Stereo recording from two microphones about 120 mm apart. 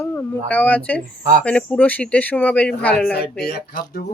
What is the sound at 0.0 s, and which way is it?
Speech, 15° left (ahead or behind).